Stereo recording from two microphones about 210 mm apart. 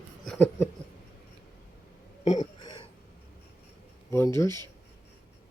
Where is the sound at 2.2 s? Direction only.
30° left (ahead or behind).